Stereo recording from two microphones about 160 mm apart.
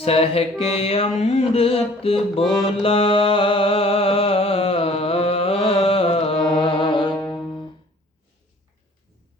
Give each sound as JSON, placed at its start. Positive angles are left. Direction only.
{"t": 0.0, "sound": "mantra", "side_deg": 40}
{"t": 2.6, "sound": "music", "side_deg": 35}